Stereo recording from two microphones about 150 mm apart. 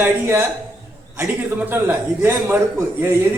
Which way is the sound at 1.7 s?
15° right (ahead or behind).